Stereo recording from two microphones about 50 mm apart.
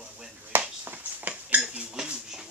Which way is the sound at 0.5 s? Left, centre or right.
Right.